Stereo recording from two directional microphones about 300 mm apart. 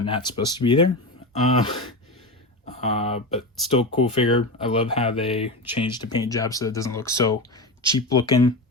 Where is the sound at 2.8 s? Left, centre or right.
Left.